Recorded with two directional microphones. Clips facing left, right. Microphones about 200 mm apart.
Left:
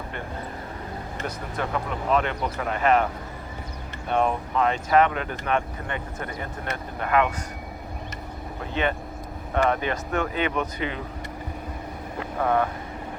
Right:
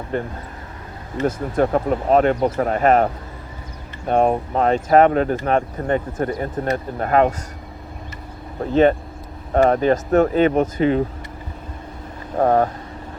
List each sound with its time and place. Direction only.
0.1 s speech: 40° right (ahead or behind)
1.5 s speech: 45° right (ahead or behind)
8.7 s speech: 40° right (ahead or behind)
12.4 s speech: 40° right (ahead or behind)